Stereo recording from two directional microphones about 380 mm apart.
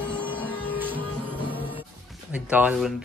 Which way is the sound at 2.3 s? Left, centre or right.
Centre.